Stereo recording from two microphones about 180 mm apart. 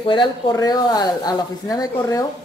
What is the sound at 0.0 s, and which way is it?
Speech, 25° left (ahead or behind).